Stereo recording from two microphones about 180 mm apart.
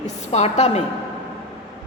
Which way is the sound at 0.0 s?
40° left (ahead or behind).